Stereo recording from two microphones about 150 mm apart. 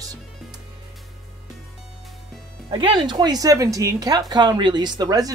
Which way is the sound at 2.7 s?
30° right (ahead or behind).